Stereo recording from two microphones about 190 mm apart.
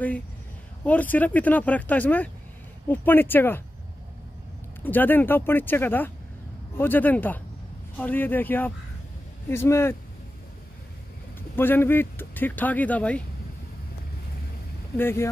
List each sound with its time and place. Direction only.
0.8 s speech: 10° left (ahead or behind)
4.8 s speech: 10° left (ahead or behind)
11.5 s speech: 10° left (ahead or behind)
15.0 s speech: 10° left (ahead or behind)